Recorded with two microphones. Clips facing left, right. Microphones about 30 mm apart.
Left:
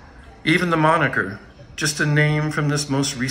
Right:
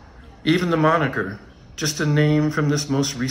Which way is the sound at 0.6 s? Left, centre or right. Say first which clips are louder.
Left 1 dB; left.